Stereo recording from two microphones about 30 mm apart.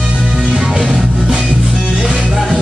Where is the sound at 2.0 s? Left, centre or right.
Right.